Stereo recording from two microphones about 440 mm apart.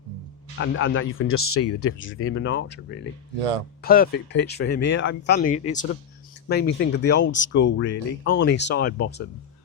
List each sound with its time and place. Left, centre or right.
0.6 s speech: left